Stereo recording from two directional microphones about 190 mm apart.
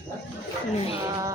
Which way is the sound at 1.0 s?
15° right (ahead or behind).